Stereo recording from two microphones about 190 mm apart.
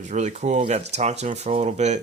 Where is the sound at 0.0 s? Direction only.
40° right (ahead or behind).